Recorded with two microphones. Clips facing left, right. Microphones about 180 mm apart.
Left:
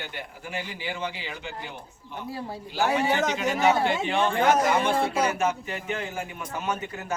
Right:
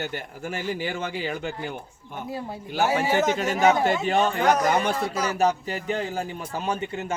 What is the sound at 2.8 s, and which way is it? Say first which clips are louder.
Speech: right 2 dB; 5° right (ahead or behind).